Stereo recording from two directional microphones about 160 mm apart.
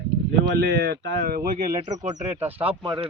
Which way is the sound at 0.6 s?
90° right.